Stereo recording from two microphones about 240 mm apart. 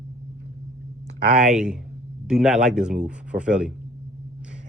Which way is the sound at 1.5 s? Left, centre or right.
Centre.